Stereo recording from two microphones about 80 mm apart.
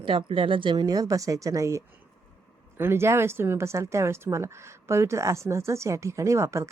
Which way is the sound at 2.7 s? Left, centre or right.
Right.